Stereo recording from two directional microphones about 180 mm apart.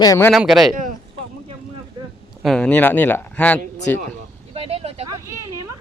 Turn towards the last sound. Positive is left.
turn(degrees=-20)  # may be behind; listen again after turning